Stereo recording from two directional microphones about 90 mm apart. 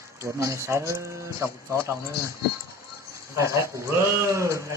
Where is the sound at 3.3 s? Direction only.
35° right (ahead or behind).